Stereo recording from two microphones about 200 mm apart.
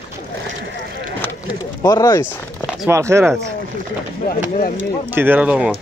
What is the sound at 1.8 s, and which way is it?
Speech, 15° left (ahead or behind).